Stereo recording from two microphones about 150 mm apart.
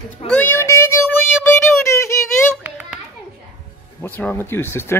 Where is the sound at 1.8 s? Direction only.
20° left (ahead or behind).